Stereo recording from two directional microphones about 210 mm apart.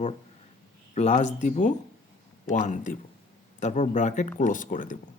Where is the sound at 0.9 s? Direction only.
30° left (ahead or behind).